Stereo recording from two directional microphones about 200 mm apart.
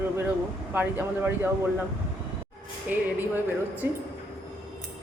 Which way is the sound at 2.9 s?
10° right (ahead or behind).